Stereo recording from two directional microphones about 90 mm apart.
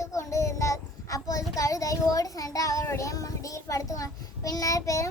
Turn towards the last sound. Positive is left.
turn(degrees=35)  # may be behind; listen again after turning